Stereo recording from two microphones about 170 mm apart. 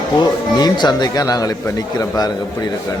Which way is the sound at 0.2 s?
25° left (ahead or behind).